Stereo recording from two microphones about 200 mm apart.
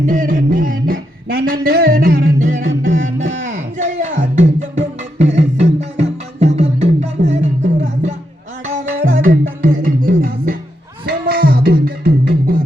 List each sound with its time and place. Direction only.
0.0 s a sound: 40° right (ahead or behind)
2.6 s music: 75° right (ahead or behind)
3.0 s music: 40° right (ahead or behind)
8.6 s music: 45° right (ahead or behind)